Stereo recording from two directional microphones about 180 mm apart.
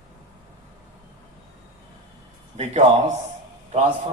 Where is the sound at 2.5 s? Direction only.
40° right (ahead or behind).